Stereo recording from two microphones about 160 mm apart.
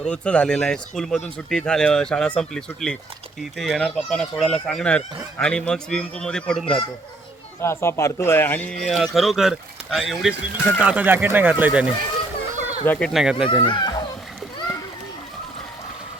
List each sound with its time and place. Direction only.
0.0 s speech: 5° left (ahead or behind)
7.6 s speech: 15° left (ahead or behind)
8.9 s speech: centre (ahead or behind)
12.8 s speech: 10° left (ahead or behind)
13.1 s speech: 5° right (ahead or behind)
13.7 s speech: 25° left (ahead or behind)